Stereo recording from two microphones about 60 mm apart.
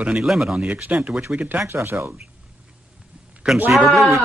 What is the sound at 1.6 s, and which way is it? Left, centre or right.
Speech, right.